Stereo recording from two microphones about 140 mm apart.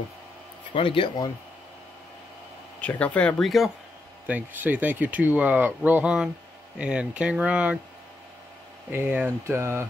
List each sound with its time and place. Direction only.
0.7 s speech: 40° left (ahead or behind)
2.8 s speech: 10° left (ahead or behind)
4.3 s speech: 10° right (ahead or behind)
8.9 s speech: 15° right (ahead or behind)